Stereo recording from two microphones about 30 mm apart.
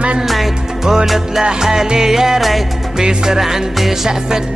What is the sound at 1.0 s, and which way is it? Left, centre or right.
Music, centre.